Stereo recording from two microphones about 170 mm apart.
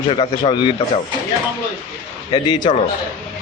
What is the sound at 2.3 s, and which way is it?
Speech, 30° left (ahead or behind).